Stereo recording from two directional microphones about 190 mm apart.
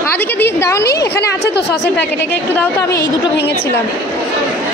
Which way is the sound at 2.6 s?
15° left (ahead or behind).